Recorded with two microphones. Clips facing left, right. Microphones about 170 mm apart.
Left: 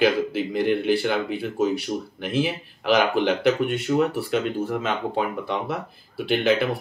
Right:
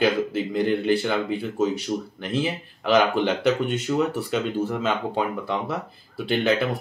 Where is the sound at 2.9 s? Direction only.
Centre (ahead or behind).